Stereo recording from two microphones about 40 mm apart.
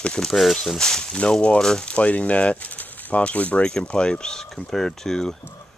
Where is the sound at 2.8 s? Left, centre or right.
Left.